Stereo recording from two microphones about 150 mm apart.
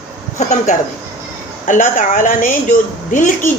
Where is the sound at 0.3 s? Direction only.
55° left (ahead or behind).